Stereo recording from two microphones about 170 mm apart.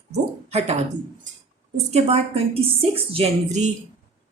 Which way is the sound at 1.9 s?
35° right (ahead or behind).